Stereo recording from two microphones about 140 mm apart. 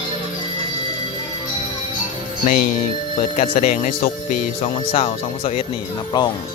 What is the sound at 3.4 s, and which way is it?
Speech, 60° left (ahead or behind).